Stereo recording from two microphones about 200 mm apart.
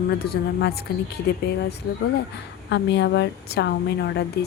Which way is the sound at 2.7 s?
60° left (ahead or behind).